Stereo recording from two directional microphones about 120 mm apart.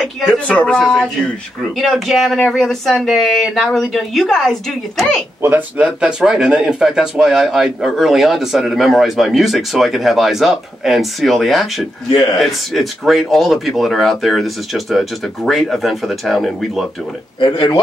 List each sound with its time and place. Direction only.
0.0 s speech: 10° left (ahead or behind)
5.4 s speech: 15° right (ahead or behind); by 16.8 s centre (ahead or behind)
17.4 s speech: 40° left (ahead or behind)